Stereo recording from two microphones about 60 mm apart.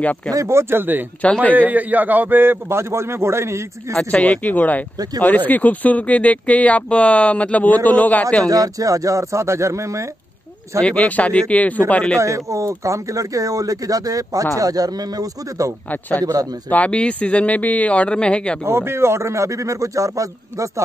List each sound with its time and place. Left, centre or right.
0.5 s a man's voice: right
1.2 s speech: left
1.6 s a man's voice: right
4.1 s speech: left
8.5 s a man's voice: right
11.1 s speech: left
12.2 s speech: right
14.6 s speech: right
15.9 s speech: left
18.7 s a man's voice: right